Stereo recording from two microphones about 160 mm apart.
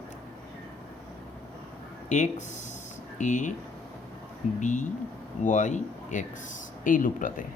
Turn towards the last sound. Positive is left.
turn(degrees=55)  # may be behind; listen again after turning